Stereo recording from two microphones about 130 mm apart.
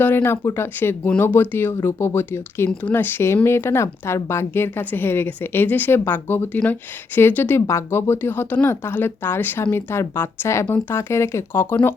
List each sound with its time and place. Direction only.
0.0 s speech: 15° left (ahead or behind)